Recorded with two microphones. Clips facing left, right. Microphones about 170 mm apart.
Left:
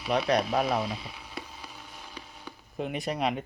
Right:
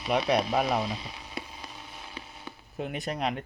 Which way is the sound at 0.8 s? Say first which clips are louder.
Even; 10° left (ahead or behind).